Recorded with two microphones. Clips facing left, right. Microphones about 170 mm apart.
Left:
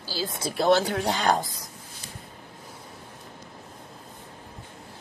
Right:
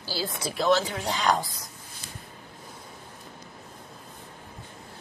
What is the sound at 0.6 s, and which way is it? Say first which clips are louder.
Speech: left 3 dB; 60° left (ahead or behind).